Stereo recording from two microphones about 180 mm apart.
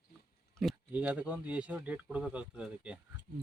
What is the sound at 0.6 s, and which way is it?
Speech, 5° right (ahead or behind).